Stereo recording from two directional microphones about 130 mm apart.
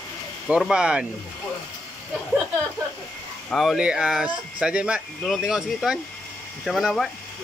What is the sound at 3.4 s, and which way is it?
Speech, centre (ahead or behind).